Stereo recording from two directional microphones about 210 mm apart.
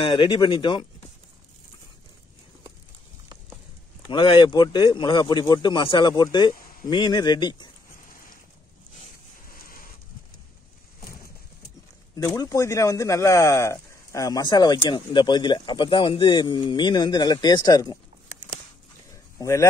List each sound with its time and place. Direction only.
0.0 s speech: 25° left (ahead or behind)
4.1 s speech: 20° left (ahead or behind)
12.4 s speech: 15° left (ahead or behind)
19.3 s speech: 15° left (ahead or behind)